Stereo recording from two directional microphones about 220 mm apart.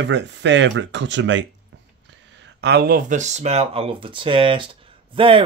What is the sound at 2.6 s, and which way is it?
Speech, 45° right (ahead or behind).